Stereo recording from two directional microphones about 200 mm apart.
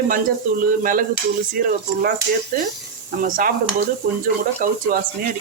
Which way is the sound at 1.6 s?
45° right (ahead or behind).